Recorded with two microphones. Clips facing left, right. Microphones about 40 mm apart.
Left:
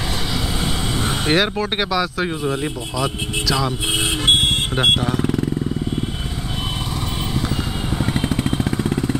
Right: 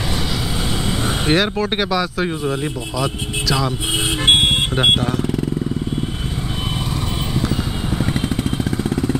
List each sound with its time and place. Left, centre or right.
1.2 s speech: centre
8.0 s vehicle: centre
8.6 s vehicle: centre